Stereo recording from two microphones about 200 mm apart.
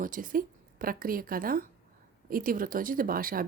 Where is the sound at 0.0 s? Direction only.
45° right (ahead or behind).